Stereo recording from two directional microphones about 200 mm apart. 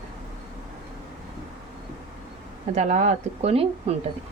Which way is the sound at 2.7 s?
35° right (ahead or behind).